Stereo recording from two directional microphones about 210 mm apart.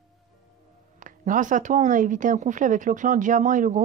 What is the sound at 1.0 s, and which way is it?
Speech, 40° right (ahead or behind).